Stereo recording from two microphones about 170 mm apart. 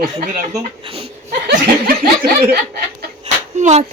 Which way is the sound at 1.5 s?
60° right (ahead or behind).